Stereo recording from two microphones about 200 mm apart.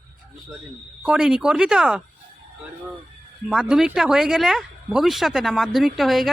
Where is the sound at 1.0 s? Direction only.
5° right (ahead or behind).